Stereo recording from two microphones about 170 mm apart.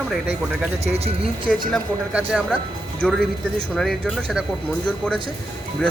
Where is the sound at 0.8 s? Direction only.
35° right (ahead or behind).